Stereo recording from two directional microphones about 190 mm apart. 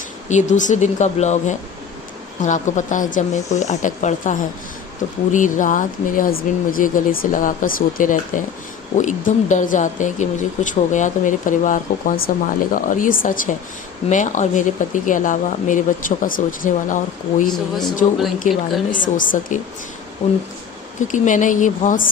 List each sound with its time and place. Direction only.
0.3 s speech: 40° left (ahead or behind)
18.5 s speech: 40° left (ahead or behind)
20.2 s speech: 30° left (ahead or behind)
21.1 s speech: 40° left (ahead or behind)